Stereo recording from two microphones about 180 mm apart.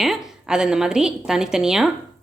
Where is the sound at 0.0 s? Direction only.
Centre (ahead or behind).